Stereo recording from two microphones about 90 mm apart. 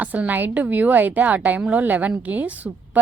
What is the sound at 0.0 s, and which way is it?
A woman's voice, 15° right (ahead or behind).